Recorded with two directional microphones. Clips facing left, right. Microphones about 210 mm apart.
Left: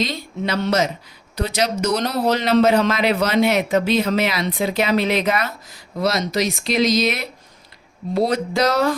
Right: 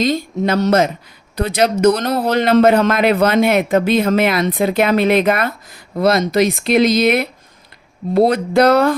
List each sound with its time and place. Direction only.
0.0 s a woman's voice: 50° right (ahead or behind)